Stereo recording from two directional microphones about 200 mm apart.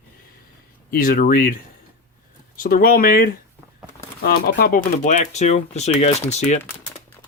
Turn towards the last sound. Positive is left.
turn(degrees=35)  # may be behind; listen again after turning